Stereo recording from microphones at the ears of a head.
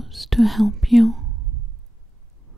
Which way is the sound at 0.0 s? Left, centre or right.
Centre.